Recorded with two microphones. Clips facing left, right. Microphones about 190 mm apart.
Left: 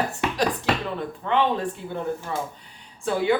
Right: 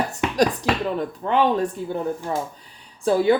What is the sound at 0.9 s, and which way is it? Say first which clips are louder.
Speech: right 3 dB; 40° right (ahead or behind).